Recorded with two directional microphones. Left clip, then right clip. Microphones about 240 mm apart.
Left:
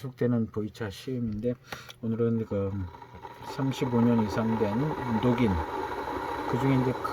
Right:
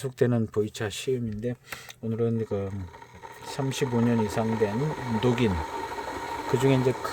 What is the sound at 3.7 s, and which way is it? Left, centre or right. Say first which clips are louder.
Speech: even; right.